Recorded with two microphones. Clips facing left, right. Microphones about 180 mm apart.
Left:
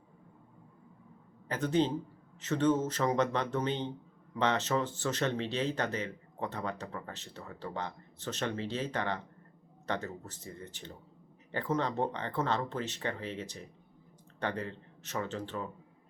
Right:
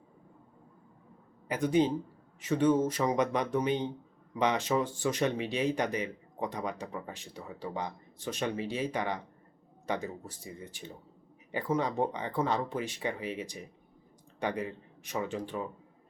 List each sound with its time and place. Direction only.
1.5 s speech: 10° right (ahead or behind)